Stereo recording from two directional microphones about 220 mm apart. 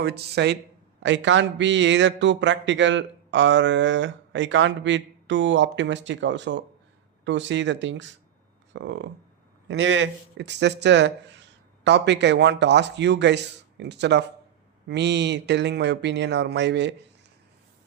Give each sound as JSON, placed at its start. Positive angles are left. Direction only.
{"t": 0.0, "sound": "a man's voice", "side_deg": -50}